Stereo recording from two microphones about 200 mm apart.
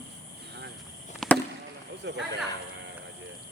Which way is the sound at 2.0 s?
60° right (ahead or behind).